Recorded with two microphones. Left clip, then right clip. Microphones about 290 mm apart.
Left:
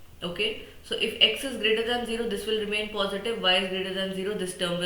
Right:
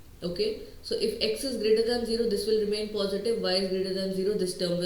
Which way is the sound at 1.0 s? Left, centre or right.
Centre.